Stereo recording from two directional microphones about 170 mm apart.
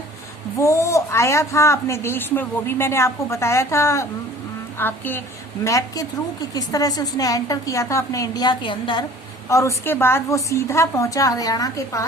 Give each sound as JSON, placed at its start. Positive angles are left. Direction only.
{"t": 0.6, "sound": "a woman's voice", "side_deg": 15}
{"t": 9.5, "sound": "speech", "side_deg": 15}